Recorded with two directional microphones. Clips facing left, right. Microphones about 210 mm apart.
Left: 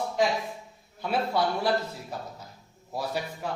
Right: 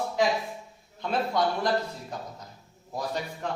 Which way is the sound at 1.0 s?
5° left (ahead or behind).